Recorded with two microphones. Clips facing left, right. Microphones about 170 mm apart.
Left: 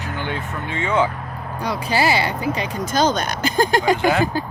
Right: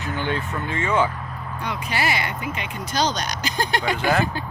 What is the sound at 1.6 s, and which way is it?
Speech, 35° left (ahead or behind).